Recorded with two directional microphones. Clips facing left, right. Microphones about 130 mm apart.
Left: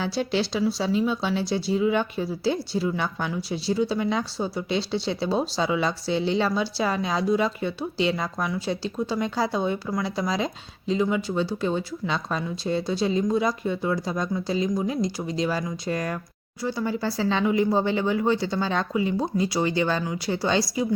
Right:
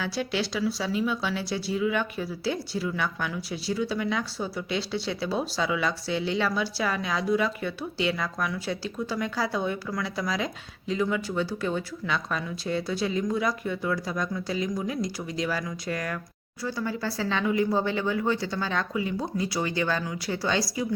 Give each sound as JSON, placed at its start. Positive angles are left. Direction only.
{"t": 0.0, "sound": "speech", "side_deg": 30}